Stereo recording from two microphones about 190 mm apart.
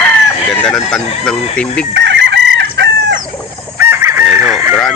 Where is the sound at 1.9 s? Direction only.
70° right (ahead or behind).